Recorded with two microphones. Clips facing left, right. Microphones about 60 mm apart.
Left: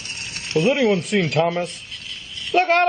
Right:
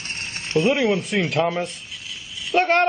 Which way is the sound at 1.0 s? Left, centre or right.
Centre.